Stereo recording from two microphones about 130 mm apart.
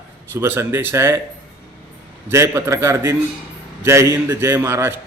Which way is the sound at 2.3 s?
20° right (ahead or behind).